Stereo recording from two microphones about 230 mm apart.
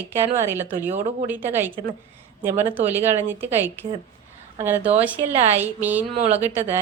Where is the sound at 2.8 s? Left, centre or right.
Centre.